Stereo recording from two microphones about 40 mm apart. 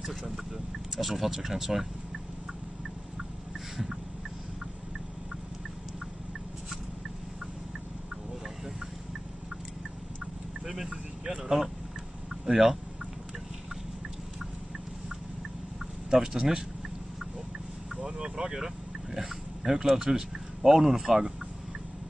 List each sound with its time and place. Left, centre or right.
0.9 s speech: centre
3.7 s fowl: centre
11.2 s speech: centre
16.1 s speech: centre
18.0 s speech: centre